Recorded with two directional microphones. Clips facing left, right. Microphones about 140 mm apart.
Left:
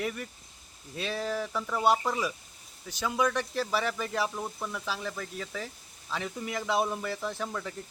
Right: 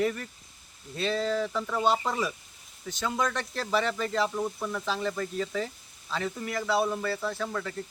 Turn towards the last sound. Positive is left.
turn(degrees=15)  # may be behind; listen again after turning